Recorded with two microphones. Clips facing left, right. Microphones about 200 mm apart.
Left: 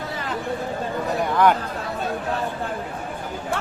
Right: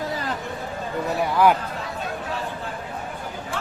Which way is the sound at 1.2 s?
5° right (ahead or behind).